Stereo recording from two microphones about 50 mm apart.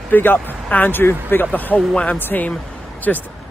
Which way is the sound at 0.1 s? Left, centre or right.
Left.